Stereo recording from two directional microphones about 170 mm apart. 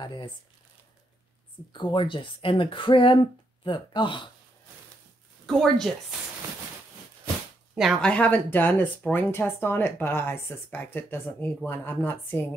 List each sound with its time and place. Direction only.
0.0 s speech: 25° left (ahead or behind)
1.7 s speech: 25° left (ahead or behind)
5.5 s speech: centre (ahead or behind)
7.7 s speech: centre (ahead or behind)